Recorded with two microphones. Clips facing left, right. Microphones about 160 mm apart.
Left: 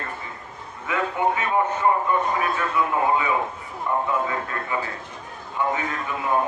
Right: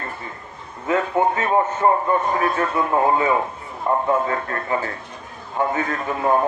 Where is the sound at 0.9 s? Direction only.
40° right (ahead or behind).